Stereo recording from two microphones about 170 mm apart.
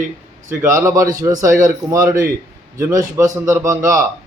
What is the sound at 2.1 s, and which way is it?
Speech, 55° right (ahead or behind).